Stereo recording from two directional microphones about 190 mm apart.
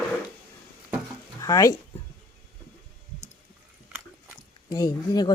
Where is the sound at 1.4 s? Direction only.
15° left (ahead or behind).